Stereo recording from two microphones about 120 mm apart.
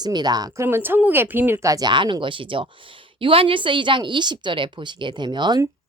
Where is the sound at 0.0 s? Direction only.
35° right (ahead or behind).